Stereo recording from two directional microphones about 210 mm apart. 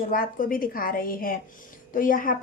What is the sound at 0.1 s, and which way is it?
A woman's voice, 40° left (ahead or behind).